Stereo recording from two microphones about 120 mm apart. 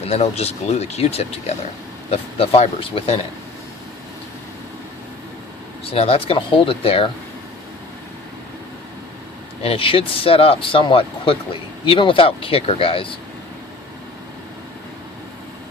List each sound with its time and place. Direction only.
0.0 s speech: 60° left (ahead or behind)
5.8 s speech: 55° left (ahead or behind)
9.6 s speech: 50° left (ahead or behind)